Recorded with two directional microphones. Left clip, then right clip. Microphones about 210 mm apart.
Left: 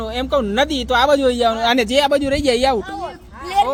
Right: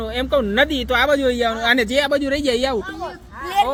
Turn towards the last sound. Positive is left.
turn(degrees=15)  # may be behind; listen again after turning